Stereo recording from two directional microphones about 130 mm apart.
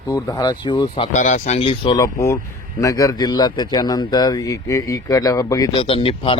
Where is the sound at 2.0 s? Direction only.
20° left (ahead or behind).